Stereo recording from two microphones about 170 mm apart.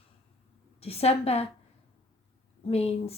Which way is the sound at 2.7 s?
35° left (ahead or behind).